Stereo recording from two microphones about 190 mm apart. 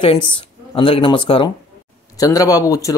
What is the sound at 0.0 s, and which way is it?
Speech, 25° left (ahead or behind).